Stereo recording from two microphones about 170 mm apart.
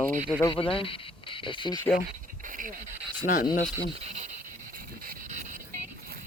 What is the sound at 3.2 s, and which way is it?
Speech, 50° left (ahead or behind).